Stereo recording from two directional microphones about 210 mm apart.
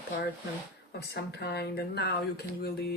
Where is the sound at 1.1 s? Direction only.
50° left (ahead or behind).